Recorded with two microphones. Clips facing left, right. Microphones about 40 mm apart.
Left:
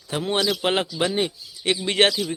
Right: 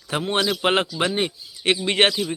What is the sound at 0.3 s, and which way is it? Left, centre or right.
Speech, right.